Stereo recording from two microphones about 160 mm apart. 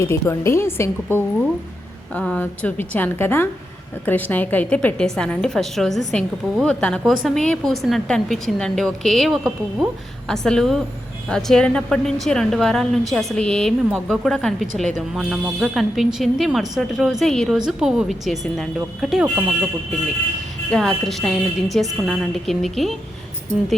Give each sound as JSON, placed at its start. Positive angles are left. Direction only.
{"t": 0.0, "sound": "a woman's voice", "side_deg": 15}
{"t": 20.7, "sound": "a woman's voice", "side_deg": 5}